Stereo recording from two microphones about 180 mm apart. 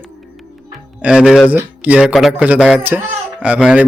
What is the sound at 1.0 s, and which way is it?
Speech, 5° right (ahead or behind).